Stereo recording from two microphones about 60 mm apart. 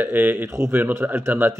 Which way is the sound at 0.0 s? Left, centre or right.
Right.